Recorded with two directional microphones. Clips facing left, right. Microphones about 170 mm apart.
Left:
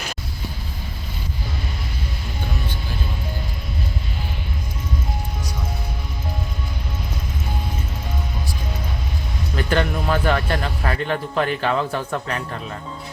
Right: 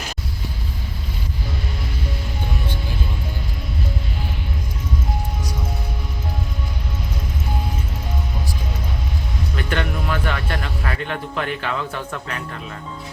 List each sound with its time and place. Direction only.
9.6 s speech: 35° left (ahead or behind)